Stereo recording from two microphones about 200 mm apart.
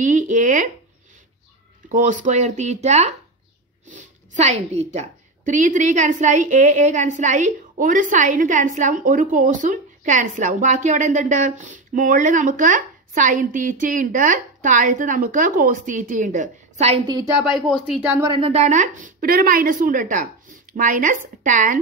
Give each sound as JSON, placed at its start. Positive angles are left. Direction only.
{"t": 0.0, "sound": "a woman's voice", "side_deg": -40}
{"t": 1.9, "sound": "a woman's voice", "side_deg": -40}
{"t": 17.6, "sound": "speech", "side_deg": 0}
{"t": 18.3, "sound": "a woman's voice", "side_deg": -30}